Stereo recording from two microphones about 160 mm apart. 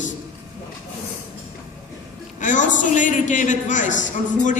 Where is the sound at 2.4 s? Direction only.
50° left (ahead or behind).